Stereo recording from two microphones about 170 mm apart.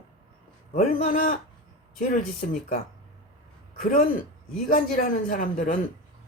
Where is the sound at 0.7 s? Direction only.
50° left (ahead or behind).